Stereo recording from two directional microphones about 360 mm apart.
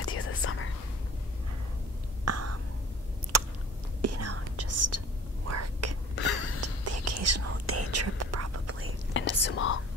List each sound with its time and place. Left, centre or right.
0.0 s whispering: left
2.2 s a sound: right
3.3 s chewing: right
4.0 s whispering: right
6.2 s a sound: left
6.6 s whispering: right
9.1 s whispering: left